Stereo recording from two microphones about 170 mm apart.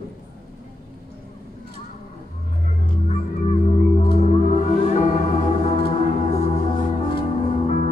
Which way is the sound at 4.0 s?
40° left (ahead or behind).